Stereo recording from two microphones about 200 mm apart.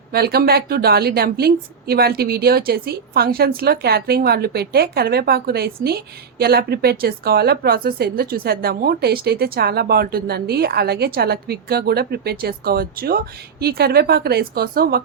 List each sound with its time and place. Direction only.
0.1 s speech: 50° right (ahead or behind)